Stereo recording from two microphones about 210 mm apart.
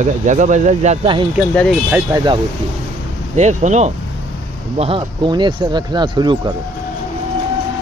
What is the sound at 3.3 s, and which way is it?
Speech, 35° right (ahead or behind).